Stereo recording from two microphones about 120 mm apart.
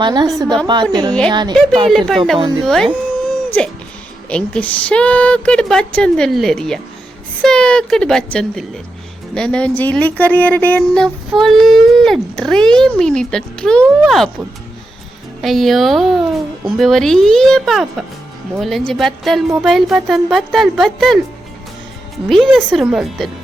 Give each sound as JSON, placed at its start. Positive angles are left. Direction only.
{"t": 0.0, "sound": "speech", "side_deg": -40}
{"t": 1.9, "sound": "a woman's voice", "side_deg": 0}
{"t": 15.4, "sound": "a woman's voice", "side_deg": 0}
{"t": 22.3, "sound": "a woman's voice", "side_deg": 0}